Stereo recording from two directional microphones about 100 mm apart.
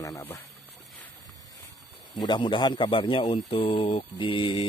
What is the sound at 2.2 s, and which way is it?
Speech, 50° left (ahead or behind).